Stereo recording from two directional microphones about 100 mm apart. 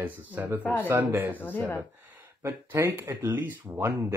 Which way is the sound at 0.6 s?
20° left (ahead or behind).